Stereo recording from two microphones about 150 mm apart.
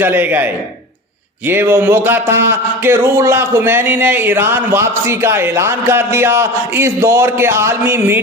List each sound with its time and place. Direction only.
0.0 s speech: 10° right (ahead or behind)